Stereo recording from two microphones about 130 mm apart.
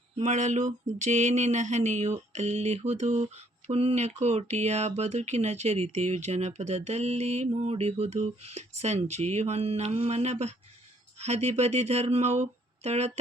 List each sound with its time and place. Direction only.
0.3 s mantra: 65° right (ahead or behind)